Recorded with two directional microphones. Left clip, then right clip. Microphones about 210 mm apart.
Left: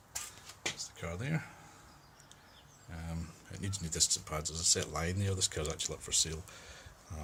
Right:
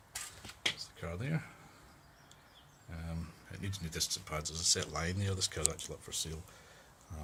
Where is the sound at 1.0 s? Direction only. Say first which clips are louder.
Left 2 dB; 15° right (ahead or behind).